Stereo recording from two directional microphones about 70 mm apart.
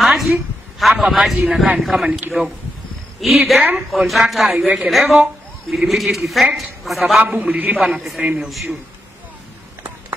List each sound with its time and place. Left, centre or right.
0.0 s a sound: centre
0.7 s a man's voice: centre
2.0 s a man's voice: right
3.2 s a woman's voice: centre
4.5 s a man's voice: centre
7.3 s a man's voice: right
7.8 s a woman's voice: centre
8.2 s a man's voice: centre